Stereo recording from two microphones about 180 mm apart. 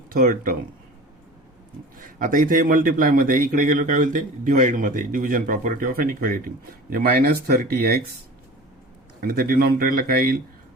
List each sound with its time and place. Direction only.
0.1 s a man's voice: 50° right (ahead or behind)
2.0 s a man's voice: 50° right (ahead or behind)
9.2 s speech: 55° right (ahead or behind)